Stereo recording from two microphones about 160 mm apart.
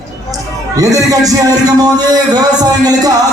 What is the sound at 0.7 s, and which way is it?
A man's voice, 20° right (ahead or behind).